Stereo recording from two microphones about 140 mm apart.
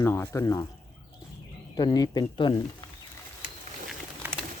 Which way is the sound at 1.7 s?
30° left (ahead or behind).